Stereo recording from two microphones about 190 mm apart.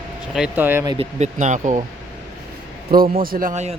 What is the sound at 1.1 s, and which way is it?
Speech, 40° right (ahead or behind).